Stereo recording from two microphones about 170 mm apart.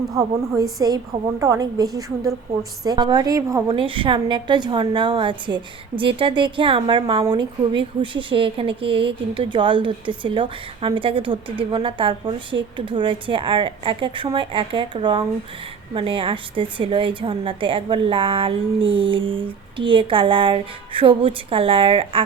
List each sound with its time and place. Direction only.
0.1 s a woman's voice: 20° right (ahead or behind)